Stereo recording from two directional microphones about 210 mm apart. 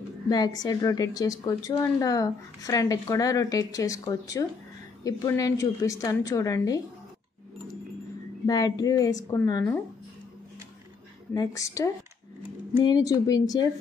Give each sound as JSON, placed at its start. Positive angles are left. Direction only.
{"t": 0.3, "sound": "speech", "side_deg": 20}
{"t": 8.5, "sound": "speech", "side_deg": 20}
{"t": 11.3, "sound": "speech", "side_deg": 15}